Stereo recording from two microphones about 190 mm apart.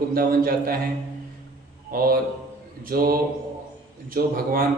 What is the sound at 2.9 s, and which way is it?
A man's voice, 50° right (ahead or behind).